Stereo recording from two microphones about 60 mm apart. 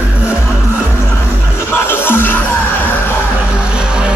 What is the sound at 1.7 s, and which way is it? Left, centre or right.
Music, left.